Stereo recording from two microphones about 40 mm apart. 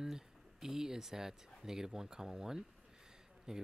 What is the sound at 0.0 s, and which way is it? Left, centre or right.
Speech, centre.